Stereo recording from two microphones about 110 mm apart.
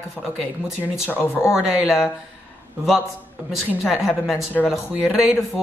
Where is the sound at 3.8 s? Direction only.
5° right (ahead or behind).